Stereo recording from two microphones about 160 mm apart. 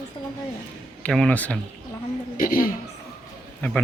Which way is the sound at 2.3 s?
60° left (ahead or behind).